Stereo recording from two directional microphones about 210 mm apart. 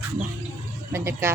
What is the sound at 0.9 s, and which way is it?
Speech, 10° right (ahead or behind).